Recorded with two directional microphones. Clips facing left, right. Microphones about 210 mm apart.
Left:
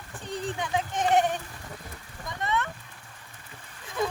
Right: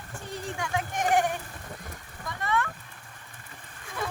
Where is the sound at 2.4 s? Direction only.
20° left (ahead or behind).